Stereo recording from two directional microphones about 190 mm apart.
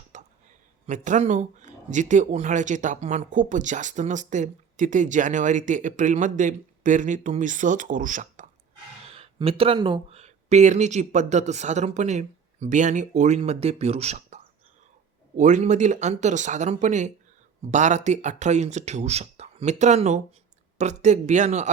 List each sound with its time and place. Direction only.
0.1 s a sound: 40° right (ahead or behind)
0.9 s speech: 40° right (ahead or behind)
9.1 s speech: 30° right (ahead or behind)